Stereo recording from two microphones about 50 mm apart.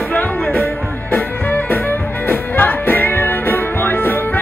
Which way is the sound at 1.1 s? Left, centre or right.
Left.